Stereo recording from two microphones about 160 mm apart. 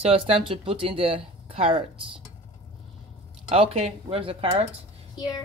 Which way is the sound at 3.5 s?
40° right (ahead or behind).